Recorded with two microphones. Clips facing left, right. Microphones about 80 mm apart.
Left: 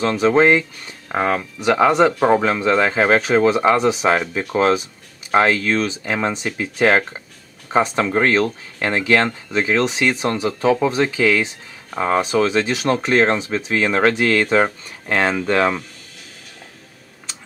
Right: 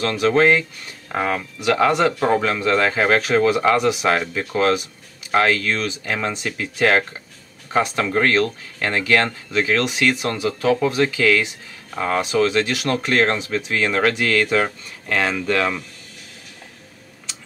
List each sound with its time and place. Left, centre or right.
0.2 s speech: left
1.6 s speech: left